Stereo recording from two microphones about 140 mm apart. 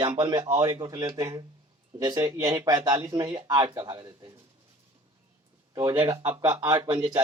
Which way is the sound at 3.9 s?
25° right (ahead or behind).